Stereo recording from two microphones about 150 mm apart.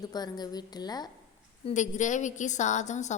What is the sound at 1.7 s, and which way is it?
A woman's voice, 55° left (ahead or behind).